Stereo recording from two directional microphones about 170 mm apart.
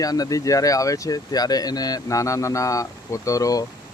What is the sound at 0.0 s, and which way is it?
Speech, 20° left (ahead or behind).